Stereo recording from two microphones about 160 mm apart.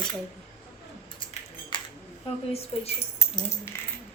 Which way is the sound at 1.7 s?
30° left (ahead or behind).